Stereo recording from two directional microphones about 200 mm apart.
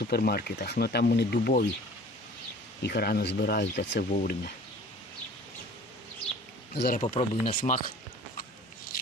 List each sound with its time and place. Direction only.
0.0 s speech: 50° left (ahead or behind)
2.8 s speech: 55° left (ahead or behind)
6.7 s speech: 50° left (ahead or behind)
7.0 s speech: 25° left (ahead or behind)